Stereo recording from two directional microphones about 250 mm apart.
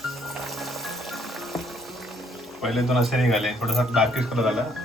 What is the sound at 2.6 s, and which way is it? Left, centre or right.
Speech, centre.